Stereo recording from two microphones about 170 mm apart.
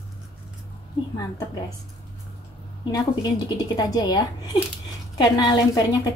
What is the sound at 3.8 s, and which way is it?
A woman's voice, 25° left (ahead or behind).